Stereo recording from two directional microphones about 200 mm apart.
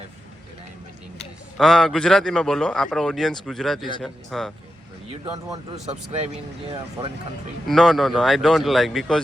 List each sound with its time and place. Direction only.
1.5 s a man's voice: centre (ahead or behind)
5.1 s speech: 25° right (ahead or behind)
7.7 s a man's voice: centre (ahead or behind)